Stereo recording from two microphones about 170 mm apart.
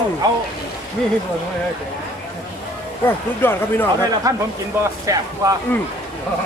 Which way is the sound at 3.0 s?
10° left (ahead or behind).